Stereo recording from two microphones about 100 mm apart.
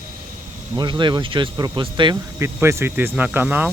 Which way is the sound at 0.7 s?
50° right (ahead or behind).